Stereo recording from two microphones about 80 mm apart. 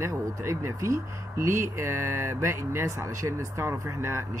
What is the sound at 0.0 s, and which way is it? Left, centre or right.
Speech, right.